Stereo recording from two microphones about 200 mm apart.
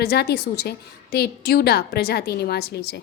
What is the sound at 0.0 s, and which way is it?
A woman's voice, 55° left (ahead or behind).